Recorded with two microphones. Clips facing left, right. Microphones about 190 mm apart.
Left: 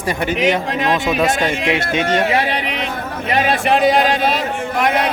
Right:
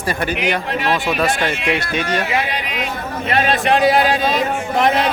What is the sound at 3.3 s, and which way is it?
Speech, 10° left (ahead or behind).